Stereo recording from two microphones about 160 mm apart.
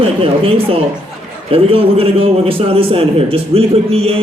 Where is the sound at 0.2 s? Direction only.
35° right (ahead or behind).